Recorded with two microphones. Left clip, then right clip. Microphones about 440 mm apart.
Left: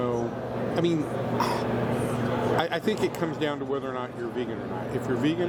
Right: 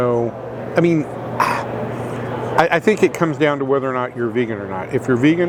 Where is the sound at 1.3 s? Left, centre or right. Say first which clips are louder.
Right 10 dB; right.